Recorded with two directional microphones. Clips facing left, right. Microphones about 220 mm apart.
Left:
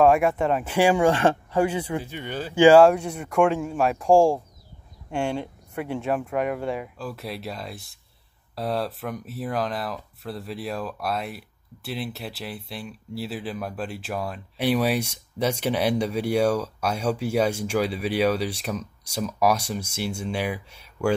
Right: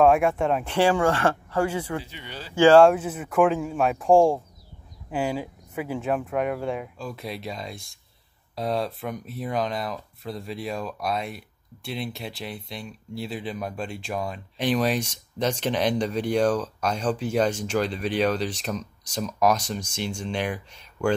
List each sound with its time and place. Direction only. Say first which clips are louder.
0.0 s speech: even; centre (ahead or behind)
0.7 s speech: left 2 dB; 15° left (ahead or behind)
2.0 s speech: left 8 dB; 50° left (ahead or behind)
2.5 s speech: left 1 dB; 15° left (ahead or behind)
2.8 s speech: even; centre (ahead or behind)